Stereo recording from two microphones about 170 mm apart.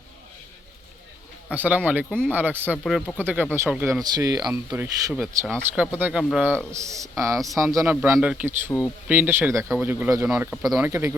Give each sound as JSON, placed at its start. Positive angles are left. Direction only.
{"t": 1.5, "sound": "speech", "side_deg": -10}
{"t": 2.7, "sound": "speech", "side_deg": 0}
{"t": 3.2, "sound": "speech", "side_deg": -10}
{"t": 4.0, "sound": "speech", "side_deg": -20}
{"t": 4.4, "sound": "speech", "side_deg": -10}
{"t": 6.7, "sound": "speech", "side_deg": -20}
{"t": 10.8, "sound": "speech", "side_deg": -15}